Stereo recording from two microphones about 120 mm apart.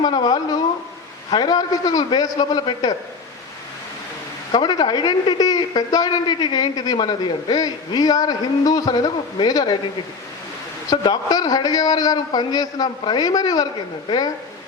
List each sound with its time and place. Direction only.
0.0 s a sound: 35° left (ahead or behind)
1.3 s a woman's voice: 35° left (ahead or behind)
4.5 s a woman's voice: 35° left (ahead or behind)
10.8 s a woman's voice: 40° left (ahead or behind)